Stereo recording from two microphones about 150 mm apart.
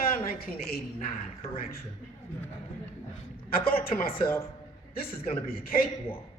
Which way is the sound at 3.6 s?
80° left.